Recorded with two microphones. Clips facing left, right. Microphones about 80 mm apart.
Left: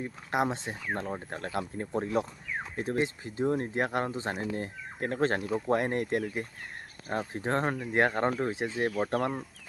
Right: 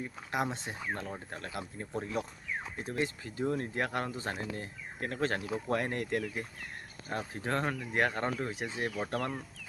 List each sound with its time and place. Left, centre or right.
0.3 s speech: left